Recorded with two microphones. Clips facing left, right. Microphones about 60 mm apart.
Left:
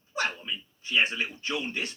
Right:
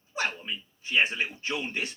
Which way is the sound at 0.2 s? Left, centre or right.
Right.